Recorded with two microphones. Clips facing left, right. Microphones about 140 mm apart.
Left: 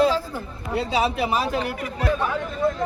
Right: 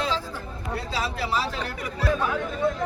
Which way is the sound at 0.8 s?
65° left (ahead or behind).